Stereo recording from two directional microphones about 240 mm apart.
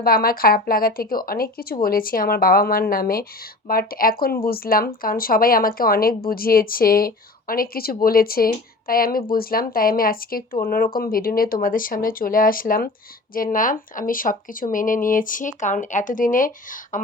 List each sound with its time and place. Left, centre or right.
0.0 s speech: left